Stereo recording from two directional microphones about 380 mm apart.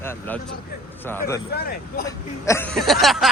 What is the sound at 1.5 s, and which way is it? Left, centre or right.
Speech, left.